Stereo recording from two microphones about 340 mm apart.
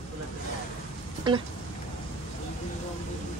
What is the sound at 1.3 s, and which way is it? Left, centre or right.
Speech, centre.